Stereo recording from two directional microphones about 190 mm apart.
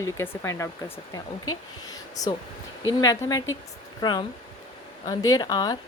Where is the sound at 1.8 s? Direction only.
20° left (ahead or behind).